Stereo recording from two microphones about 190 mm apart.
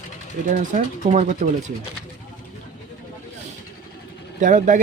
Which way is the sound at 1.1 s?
40° right (ahead or behind).